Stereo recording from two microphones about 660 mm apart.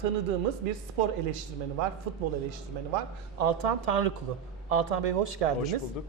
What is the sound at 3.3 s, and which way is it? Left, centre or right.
Speech, right.